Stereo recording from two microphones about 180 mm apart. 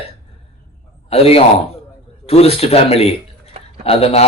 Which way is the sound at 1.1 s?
35° left (ahead or behind).